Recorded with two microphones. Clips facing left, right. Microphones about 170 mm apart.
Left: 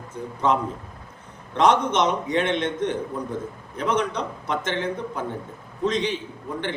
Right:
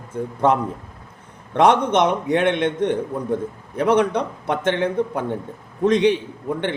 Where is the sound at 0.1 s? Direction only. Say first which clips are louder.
Right 7 dB; 55° right (ahead or behind).